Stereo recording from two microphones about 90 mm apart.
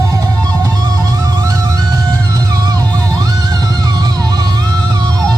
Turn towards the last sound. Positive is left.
turn(degrees=-50)  # may be behind; listen again after turning